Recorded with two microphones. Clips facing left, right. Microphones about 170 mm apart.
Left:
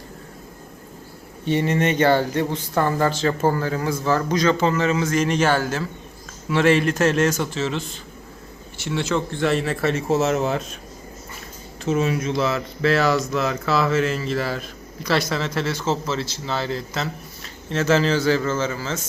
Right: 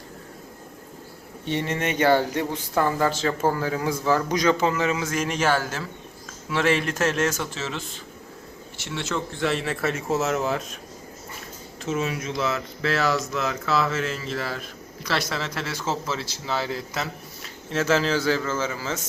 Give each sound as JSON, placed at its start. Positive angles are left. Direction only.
{"t": 1.5, "sound": "speech", "side_deg": 0}
{"t": 8.8, "sound": "speech", "side_deg": 0}
{"t": 10.3, "sound": "speech", "side_deg": 30}
{"t": 11.9, "sound": "speech", "side_deg": 0}